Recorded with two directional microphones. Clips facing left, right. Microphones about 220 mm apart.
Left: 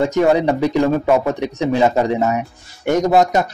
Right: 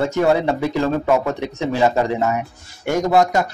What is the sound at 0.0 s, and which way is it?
Speech, 20° left (ahead or behind).